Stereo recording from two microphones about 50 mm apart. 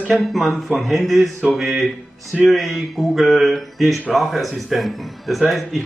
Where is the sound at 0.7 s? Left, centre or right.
Centre.